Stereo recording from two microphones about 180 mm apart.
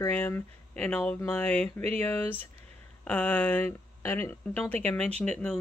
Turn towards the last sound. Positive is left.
turn(degrees=5)  # may be behind; listen again after turning